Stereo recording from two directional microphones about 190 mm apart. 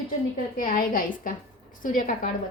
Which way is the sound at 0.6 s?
45° left (ahead or behind).